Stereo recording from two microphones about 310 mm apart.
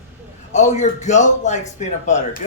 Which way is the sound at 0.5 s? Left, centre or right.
Left.